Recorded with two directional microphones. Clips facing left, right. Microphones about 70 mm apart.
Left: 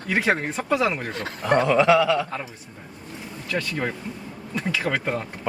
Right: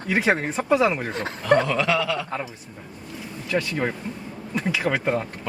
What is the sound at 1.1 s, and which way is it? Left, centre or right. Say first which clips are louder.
Speech: right 2 dB; right.